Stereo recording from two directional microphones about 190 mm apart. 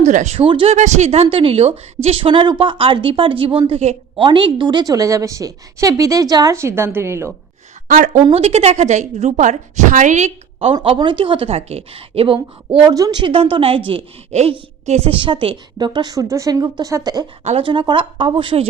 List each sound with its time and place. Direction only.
0.0 s a woman's voice: 40° right (ahead or behind); by 7.3 s 15° right (ahead or behind)
7.9 s a woman's voice: 40° right (ahead or behind); by 17.2 s 20° right (ahead or behind)
17.4 s a woman's voice: 30° right (ahead or behind)